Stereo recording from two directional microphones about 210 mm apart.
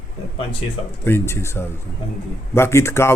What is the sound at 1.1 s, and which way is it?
A man's voice, 10° left (ahead or behind).